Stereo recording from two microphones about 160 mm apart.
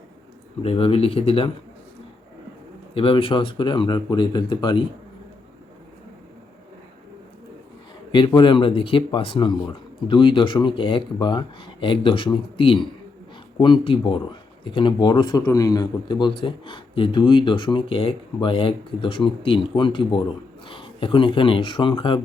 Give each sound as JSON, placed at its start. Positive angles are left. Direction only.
{"t": 0.6, "sound": "a man's voice", "side_deg": 35}
{"t": 2.9, "sound": "speech", "side_deg": 35}
{"t": 8.1, "sound": "a man's voice", "side_deg": 30}